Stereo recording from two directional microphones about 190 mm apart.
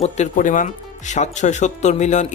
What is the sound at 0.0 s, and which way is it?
Speech, 40° left (ahead or behind).